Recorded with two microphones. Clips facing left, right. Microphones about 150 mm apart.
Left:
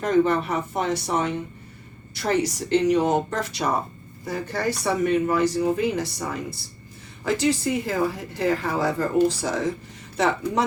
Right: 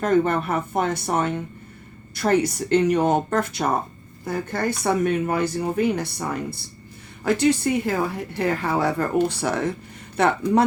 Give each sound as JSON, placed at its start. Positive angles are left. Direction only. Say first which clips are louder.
{"t": 0.0, "sound": "speech", "louder": "even", "side_deg": -55}
{"t": 7.3, "sound": "speech", "louder": "right 3 dB", "side_deg": -55}